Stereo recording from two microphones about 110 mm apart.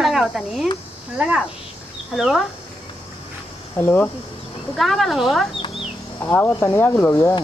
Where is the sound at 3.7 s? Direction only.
20° left (ahead or behind).